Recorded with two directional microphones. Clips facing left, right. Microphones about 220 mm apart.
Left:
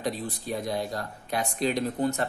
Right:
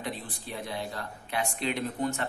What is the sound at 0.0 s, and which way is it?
Speech, 40° left (ahead or behind).